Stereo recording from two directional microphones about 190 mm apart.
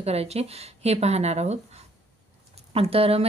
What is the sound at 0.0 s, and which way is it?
Speech, 35° right (ahead or behind).